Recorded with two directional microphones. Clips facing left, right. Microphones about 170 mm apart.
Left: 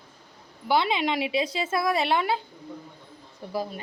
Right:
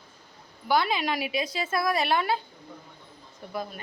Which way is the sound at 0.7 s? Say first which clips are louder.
Left 1 dB; 25° left (ahead or behind).